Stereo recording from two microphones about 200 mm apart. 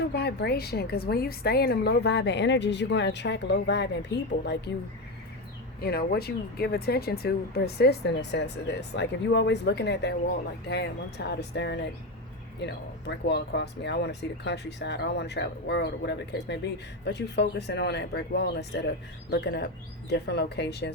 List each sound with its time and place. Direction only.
0.1 s speech: 55° left (ahead or behind)
5.8 s speech: 50° left (ahead or behind)